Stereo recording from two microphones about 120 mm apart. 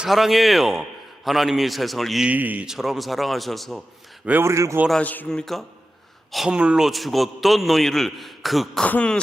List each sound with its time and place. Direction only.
0.0 s a man's voice: centre (ahead or behind)
2.3 s a man's voice: 15° right (ahead or behind)
4.3 s speech: 20° right (ahead or behind)
4.9 s a man's voice: 10° left (ahead or behind)